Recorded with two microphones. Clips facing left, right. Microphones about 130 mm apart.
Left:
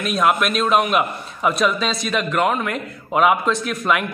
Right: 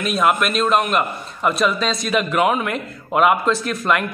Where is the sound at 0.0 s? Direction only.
Centre (ahead or behind).